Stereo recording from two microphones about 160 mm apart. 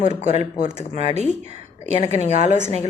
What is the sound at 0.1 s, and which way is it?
Speech, 45° right (ahead or behind).